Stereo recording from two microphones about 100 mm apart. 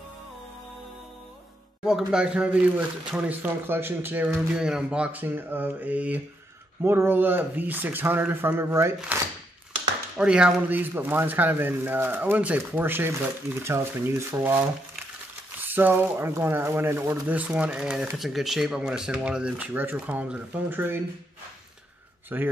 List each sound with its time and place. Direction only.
1.9 s speech: 5° right (ahead or behind)
4.4 s speech: 5° right (ahead or behind); by 9.2 s 25° right (ahead or behind)
10.1 s speech: 10° right (ahead or behind)
15.6 s speech: 20° right (ahead or behind)
17.3 s speech: 15° right (ahead or behind)
22.3 s speech: 20° right (ahead or behind)